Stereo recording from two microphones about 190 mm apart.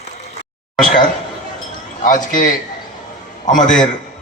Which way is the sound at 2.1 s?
40° left (ahead or behind).